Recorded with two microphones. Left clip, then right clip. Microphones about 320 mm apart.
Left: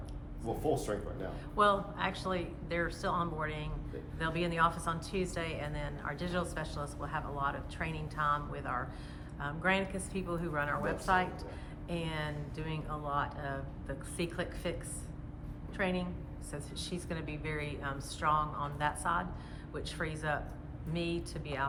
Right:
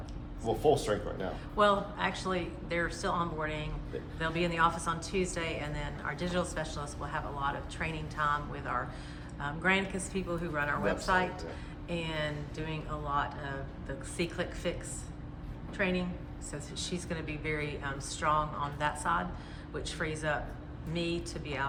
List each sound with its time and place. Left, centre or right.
0.6 s a man's voice: right
1.5 s a woman's voice: centre
15.8 s a woman's voice: centre